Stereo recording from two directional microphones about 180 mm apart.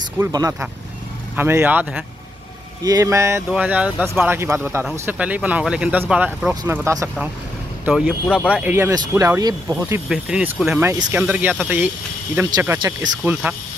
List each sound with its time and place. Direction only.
0.2 s speech: 20° right (ahead or behind)
2.8 s speech: 20° right (ahead or behind)
6.5 s speech: 20° right (ahead or behind)
7.8 s speech: 5° right (ahead or behind)
12.4 s speech: 25° right (ahead or behind)
13.2 s speech: 10° right (ahead or behind)